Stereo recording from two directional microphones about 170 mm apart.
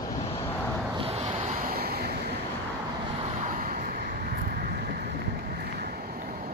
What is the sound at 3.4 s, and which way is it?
Vehicle, 55° right (ahead or behind).